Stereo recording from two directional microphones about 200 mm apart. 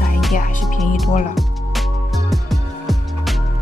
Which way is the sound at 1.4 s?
Centre (ahead or behind).